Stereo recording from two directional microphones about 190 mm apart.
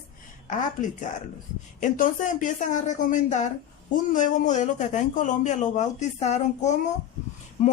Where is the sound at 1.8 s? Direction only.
45° left (ahead or behind).